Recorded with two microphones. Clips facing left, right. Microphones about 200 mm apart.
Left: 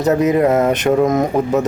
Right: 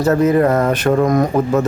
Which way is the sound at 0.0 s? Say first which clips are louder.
Right 1 dB; 20° left (ahead or behind).